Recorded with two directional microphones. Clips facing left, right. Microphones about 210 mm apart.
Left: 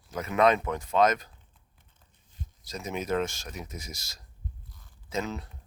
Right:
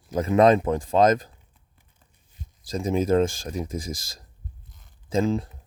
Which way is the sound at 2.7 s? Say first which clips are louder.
Right 9 dB; 30° right (ahead or behind).